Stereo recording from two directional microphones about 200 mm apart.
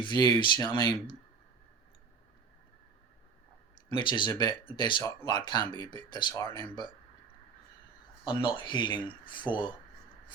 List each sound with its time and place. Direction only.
0.0 s speech: 20° left (ahead or behind)
3.8 s speech: 25° left (ahead or behind)
8.2 s speech: 25° left (ahead or behind)